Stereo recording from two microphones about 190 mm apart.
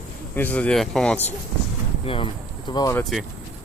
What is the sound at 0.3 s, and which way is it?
Speech, 10° left (ahead or behind).